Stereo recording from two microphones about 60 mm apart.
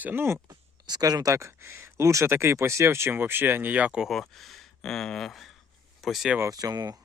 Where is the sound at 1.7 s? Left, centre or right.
Right.